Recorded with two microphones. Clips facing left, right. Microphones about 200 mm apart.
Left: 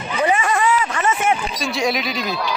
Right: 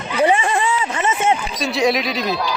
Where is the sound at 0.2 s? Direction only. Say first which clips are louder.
Right 2 dB; 30° right (ahead or behind).